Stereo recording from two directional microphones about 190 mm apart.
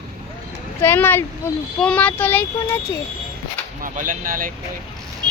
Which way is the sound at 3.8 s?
45° right (ahead or behind).